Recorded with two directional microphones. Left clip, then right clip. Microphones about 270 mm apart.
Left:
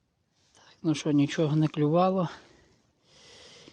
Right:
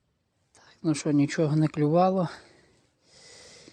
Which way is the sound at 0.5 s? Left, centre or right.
Centre.